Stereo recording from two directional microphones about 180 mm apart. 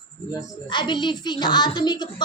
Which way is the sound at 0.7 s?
25° left (ahead or behind).